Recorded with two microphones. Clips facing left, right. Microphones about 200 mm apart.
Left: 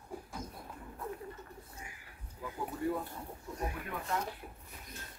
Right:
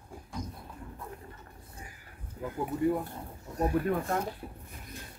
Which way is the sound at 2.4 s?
55° right (ahead or behind).